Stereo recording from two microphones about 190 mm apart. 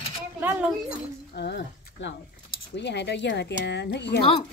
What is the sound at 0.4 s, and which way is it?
Speech, 10° right (ahead or behind).